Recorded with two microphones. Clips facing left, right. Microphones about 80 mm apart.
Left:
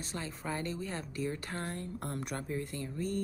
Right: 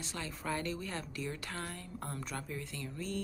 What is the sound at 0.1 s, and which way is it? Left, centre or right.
Speech, left.